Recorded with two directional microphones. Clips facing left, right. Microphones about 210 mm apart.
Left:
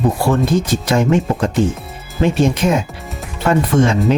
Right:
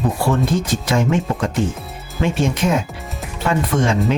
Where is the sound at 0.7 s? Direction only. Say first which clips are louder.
Left 3 dB; 40° left (ahead or behind).